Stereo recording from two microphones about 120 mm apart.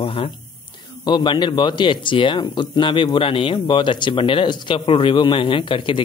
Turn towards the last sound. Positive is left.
turn(degrees=45)  # may be behind; listen again after turning